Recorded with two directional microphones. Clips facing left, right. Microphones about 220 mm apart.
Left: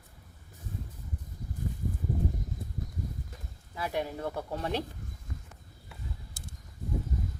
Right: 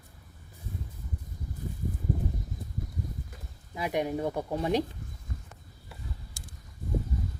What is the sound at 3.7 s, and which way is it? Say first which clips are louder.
Speech: right 4 dB; 15° right (ahead or behind).